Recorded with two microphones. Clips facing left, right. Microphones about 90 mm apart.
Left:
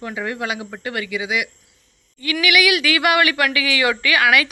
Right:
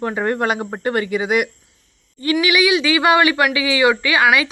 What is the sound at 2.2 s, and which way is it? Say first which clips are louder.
Speech: right 2 dB; 30° right (ahead or behind).